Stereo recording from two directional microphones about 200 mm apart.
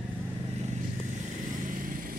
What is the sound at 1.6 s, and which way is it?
Vehicle, 40° right (ahead or behind).